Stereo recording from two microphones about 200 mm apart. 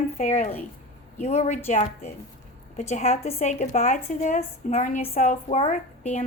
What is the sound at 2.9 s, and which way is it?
A woman's voice, 35° left (ahead or behind).